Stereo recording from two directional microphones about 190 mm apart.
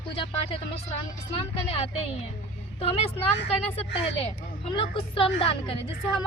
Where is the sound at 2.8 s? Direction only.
30° left (ahead or behind).